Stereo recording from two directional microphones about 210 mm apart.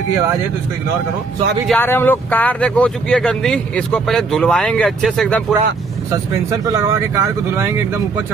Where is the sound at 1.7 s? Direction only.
10° left (ahead or behind).